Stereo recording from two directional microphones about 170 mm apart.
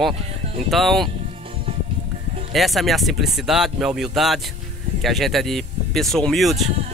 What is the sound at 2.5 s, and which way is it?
Speech, centre (ahead or behind).